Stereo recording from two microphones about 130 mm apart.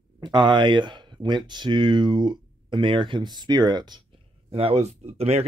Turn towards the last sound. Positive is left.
turn(degrees=-55)  # may be behind; listen again after turning